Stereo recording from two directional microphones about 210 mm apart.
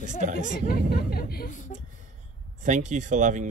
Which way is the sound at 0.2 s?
35° right (ahead or behind).